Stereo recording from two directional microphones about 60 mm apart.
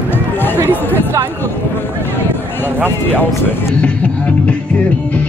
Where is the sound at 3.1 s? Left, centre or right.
Left.